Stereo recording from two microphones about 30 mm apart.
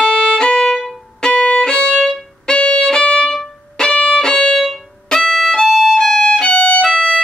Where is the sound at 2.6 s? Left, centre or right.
Left.